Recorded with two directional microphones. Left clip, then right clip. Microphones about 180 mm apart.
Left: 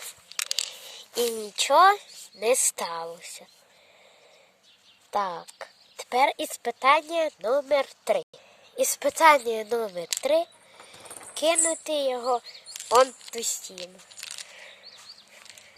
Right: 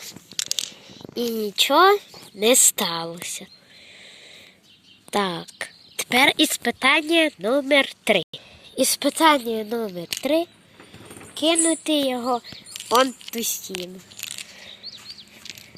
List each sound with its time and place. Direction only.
0.9 s speech: 10° left (ahead or behind)
2.5 s speech: centre (ahead or behind)
5.1 s a woman's voice: 5° right (ahead or behind)
8.9 s a woman's voice: 5° left (ahead or behind)
10.2 s a child's voice: 10° left (ahead or behind)
11.6 s speech: centre (ahead or behind)
13.8 s a sound: 40° left (ahead or behind)